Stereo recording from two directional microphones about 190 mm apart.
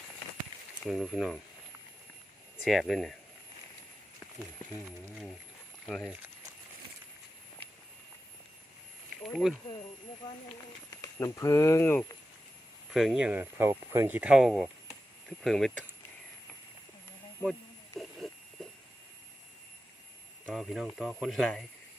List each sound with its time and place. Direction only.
0.9 s speech: centre (ahead or behind)
2.6 s speech: centre (ahead or behind)
5.8 s speech: centre (ahead or behind)
9.2 s speech: centre (ahead or behind)
10.9 s speech: 20° left (ahead or behind)
12.9 s speech: centre (ahead or behind)
17.9 s a sound: centre (ahead or behind)
20.5 s speech: centre (ahead or behind)